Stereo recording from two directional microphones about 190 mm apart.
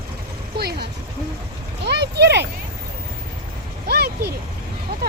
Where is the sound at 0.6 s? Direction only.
60° right (ahead or behind).